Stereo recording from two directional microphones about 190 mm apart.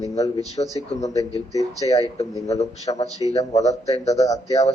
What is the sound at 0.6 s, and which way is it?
Speech, 25° left (ahead or behind).